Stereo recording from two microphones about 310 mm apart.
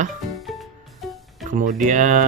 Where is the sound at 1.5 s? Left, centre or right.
Right.